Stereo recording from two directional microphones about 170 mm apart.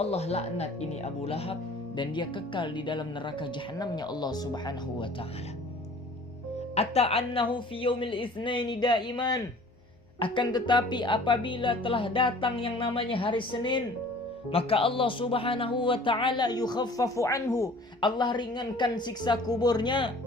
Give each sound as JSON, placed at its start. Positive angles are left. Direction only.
{"t": 0.0, "sound": "speech", "side_deg": 40}
{"t": 6.7, "sound": "speech", "side_deg": 35}